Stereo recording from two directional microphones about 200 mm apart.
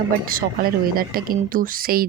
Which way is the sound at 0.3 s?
45° right (ahead or behind).